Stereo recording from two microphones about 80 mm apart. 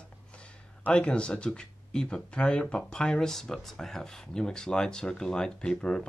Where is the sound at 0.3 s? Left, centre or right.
Centre.